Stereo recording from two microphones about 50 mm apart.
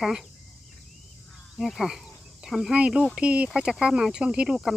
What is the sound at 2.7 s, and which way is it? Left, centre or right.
Speech, right.